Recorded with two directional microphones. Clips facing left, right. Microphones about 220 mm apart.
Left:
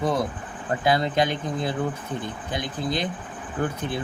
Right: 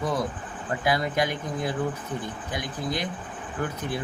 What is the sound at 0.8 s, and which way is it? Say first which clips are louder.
Speech: left 3 dB; 25° left (ahead or behind).